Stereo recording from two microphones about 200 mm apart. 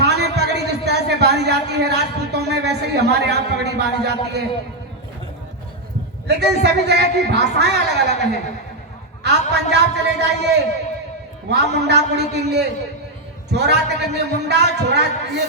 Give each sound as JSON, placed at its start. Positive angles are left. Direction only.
{"t": 0.0, "sound": "speech", "side_deg": -55}
{"t": 6.2, "sound": "speech", "side_deg": -55}
{"t": 11.8, "sound": "speech", "side_deg": -55}